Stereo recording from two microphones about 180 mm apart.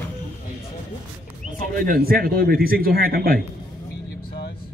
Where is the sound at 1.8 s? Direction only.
55° right (ahead or behind).